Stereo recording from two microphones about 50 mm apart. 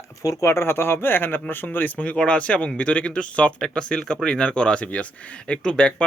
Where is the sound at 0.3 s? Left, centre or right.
Left.